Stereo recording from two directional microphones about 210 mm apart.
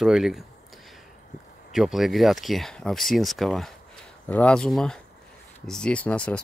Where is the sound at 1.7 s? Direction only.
Centre (ahead or behind).